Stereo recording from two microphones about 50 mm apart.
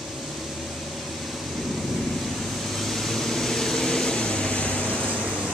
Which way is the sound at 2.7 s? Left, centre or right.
Centre.